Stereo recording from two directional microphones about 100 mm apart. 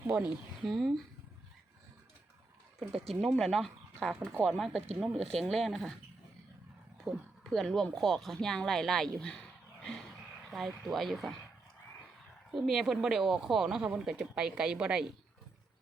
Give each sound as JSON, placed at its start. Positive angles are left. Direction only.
{"t": 0.1, "sound": "speech", "side_deg": -5}
{"t": 3.2, "sound": "speech", "side_deg": 0}
{"t": 4.1, "sound": "speech", "side_deg": -15}
{"t": 4.5, "sound": "speech", "side_deg": 0}
{"t": 4.9, "sound": "speech", "side_deg": -10}
{"t": 5.4, "sound": "speech", "side_deg": 0}
{"t": 7.1, "sound": "speech", "side_deg": 0}
{"t": 12.5, "sound": "speech", "side_deg": 0}